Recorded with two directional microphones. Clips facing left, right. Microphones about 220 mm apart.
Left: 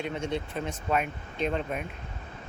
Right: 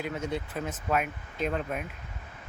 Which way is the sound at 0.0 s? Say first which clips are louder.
Left 1 dB; 5° right (ahead or behind).